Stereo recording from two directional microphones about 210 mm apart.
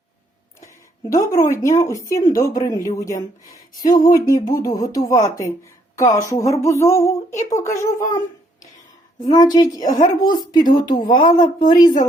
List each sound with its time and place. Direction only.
1.1 s a woman's voice: 15° left (ahead or behind)
6.3 s a sound: 15° left (ahead or behind)
7.5 s a woman's voice: 15° left (ahead or behind)
9.3 s a woman's voice: 20° left (ahead or behind)
9.8 s speech: 35° left (ahead or behind)
10.2 s speech: 20° left (ahead or behind)
11.0 s speech: 40° left (ahead or behind)
11.3 s speech: 20° left (ahead or behind)